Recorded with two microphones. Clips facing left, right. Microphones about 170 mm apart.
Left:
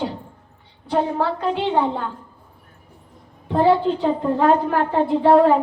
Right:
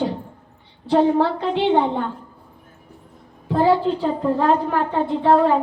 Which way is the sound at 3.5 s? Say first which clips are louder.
Even; centre (ahead or behind).